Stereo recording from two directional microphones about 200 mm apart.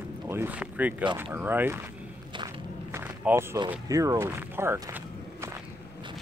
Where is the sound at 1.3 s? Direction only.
10° right (ahead or behind).